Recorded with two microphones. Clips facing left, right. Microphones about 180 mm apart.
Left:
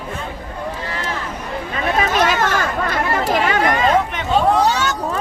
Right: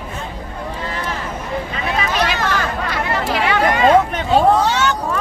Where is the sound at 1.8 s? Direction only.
45° left (ahead or behind).